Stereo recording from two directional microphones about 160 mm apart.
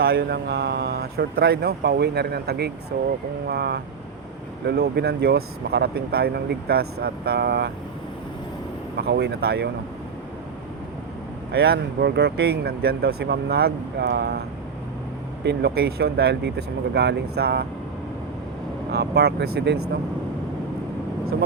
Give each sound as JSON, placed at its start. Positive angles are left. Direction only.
{"t": 0.0, "sound": "speech", "side_deg": -75}
{"t": 9.0, "sound": "speech", "side_deg": -90}
{"t": 11.5, "sound": "speech", "side_deg": -85}
{"t": 15.4, "sound": "speech", "side_deg": -75}
{"t": 18.9, "sound": "speech", "side_deg": -90}